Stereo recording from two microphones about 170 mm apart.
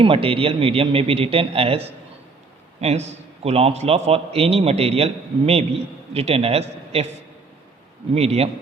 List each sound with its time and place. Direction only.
0.0 s a man's voice: 35° right (ahead or behind)
8.1 s a man's voice: 40° right (ahead or behind)